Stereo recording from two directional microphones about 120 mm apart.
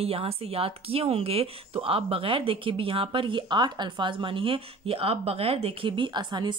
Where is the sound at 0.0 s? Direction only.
55° right (ahead or behind).